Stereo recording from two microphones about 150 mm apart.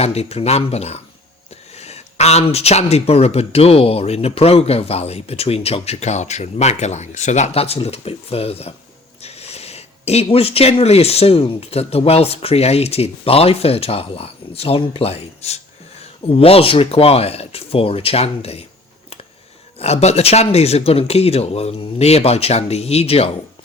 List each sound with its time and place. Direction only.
0.0 s speech: 45° left (ahead or behind)
19.8 s speech: 45° left (ahead or behind)